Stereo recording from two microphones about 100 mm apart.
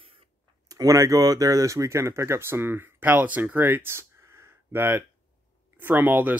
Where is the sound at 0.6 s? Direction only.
35° right (ahead or behind).